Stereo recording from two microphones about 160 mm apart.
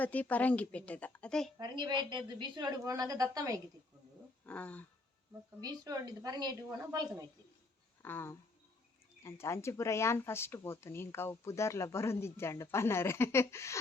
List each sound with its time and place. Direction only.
0.0 s speech: 10° left (ahead or behind)
1.5 s a woman's voice: 25° right (ahead or behind)
4.4 s a sound: 10° left (ahead or behind)
5.5 s a woman's voice: 25° right (ahead or behind)
8.0 s speech: 15° left (ahead or behind)